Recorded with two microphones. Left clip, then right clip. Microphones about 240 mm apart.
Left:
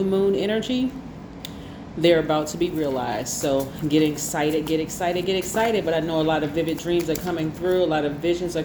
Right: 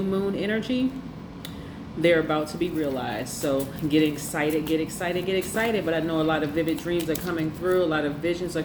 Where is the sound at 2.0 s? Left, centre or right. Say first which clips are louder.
Left 3 dB; left.